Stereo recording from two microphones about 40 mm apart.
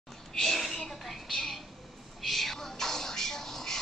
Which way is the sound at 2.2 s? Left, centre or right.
Centre.